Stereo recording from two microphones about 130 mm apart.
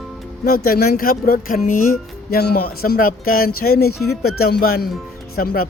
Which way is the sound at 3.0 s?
90° left.